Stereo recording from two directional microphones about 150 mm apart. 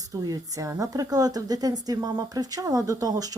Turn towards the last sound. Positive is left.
turn(degrees=-25)  # may be behind; listen again after turning